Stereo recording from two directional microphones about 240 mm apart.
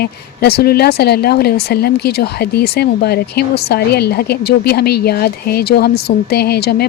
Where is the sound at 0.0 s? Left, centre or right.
Left.